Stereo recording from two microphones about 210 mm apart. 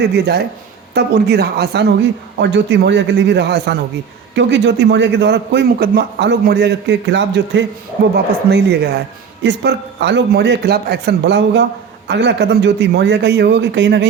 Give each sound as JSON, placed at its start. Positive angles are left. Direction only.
{"t": 0.0, "sound": "a man's voice", "side_deg": -50}